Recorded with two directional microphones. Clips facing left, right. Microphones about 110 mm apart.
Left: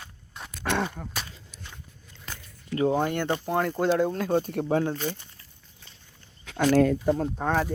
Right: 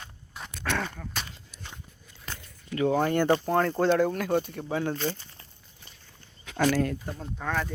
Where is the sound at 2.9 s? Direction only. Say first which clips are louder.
Right 2 dB; 10° left (ahead or behind).